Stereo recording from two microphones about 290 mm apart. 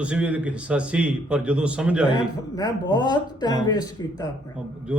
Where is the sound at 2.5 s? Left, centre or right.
Centre.